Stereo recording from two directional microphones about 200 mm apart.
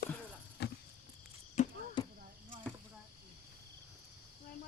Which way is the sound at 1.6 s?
35° left (ahead or behind).